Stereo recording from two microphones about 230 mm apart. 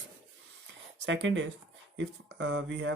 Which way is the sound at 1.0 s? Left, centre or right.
Right.